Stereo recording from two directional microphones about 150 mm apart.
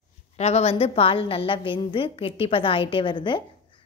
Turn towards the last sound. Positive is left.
turn(degrees=35)  # may be behind; listen again after turning